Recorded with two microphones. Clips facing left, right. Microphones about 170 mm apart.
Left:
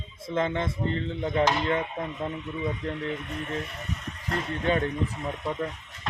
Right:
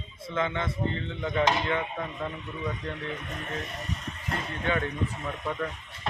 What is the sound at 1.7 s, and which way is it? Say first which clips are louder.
Chop: left 2 dB; 25° left (ahead or behind).